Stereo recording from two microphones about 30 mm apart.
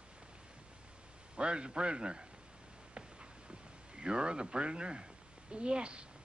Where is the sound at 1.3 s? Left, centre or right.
Right.